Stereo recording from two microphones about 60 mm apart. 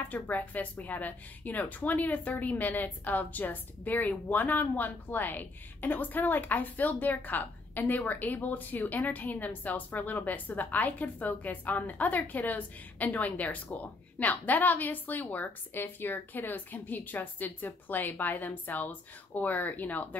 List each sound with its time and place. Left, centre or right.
0.1 s a woman's voice: left